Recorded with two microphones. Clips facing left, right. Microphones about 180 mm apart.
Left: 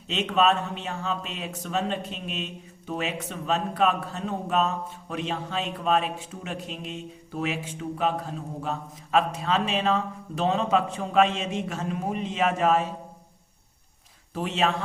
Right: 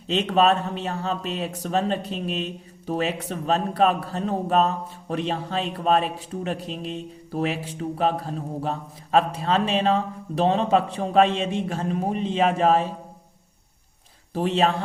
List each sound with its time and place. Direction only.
0.1 s a man's voice: 35° right (ahead or behind)
14.3 s a man's voice: 35° right (ahead or behind)